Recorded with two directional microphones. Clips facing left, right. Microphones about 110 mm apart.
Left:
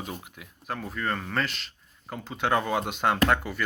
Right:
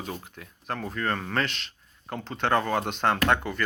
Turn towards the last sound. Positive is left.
turn(degrees=5)  # may be behind; listen again after turning